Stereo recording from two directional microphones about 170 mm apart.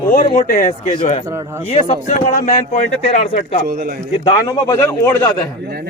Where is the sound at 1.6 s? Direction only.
40° left (ahead or behind).